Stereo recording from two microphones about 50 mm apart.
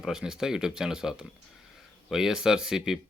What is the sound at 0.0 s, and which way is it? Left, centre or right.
Speech, centre.